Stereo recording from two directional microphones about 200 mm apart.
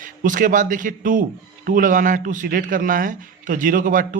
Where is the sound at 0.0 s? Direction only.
40° right (ahead or behind).